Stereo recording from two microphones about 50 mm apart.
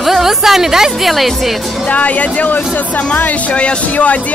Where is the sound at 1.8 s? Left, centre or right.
Left.